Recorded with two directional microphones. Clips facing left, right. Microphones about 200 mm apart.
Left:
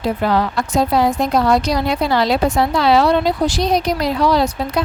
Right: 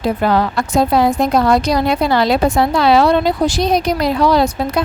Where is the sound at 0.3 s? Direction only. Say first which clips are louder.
Right 2 dB; 50° right (ahead or behind).